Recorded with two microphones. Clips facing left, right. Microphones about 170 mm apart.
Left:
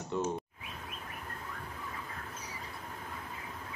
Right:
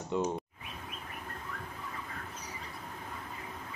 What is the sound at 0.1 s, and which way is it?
Speech, 15° right (ahead or behind).